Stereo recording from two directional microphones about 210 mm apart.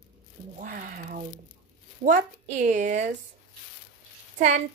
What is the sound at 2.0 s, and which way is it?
A woman's voice, 35° right (ahead or behind).